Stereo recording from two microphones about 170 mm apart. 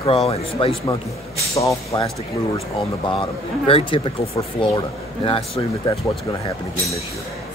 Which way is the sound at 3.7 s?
30° left (ahead or behind).